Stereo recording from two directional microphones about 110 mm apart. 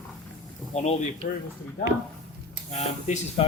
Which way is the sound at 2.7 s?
85° left.